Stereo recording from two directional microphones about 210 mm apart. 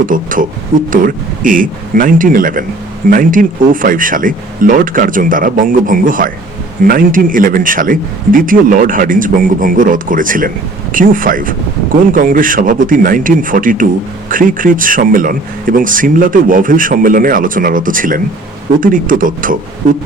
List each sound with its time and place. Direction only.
0.0 s speech: 40° right (ahead or behind)